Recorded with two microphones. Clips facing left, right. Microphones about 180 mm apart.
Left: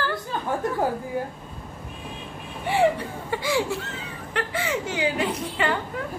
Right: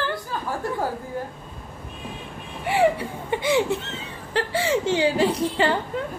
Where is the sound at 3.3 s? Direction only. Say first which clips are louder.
Right 4 dB; 20° right (ahead or behind).